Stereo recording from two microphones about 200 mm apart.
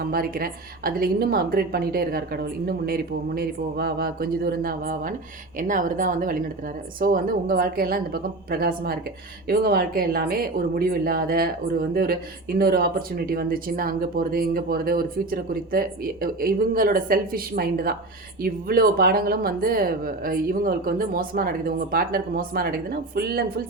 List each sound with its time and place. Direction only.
0.1 s speech: 45° right (ahead or behind)